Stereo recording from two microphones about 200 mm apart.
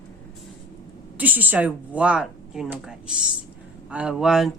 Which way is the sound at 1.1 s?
10° right (ahead or behind).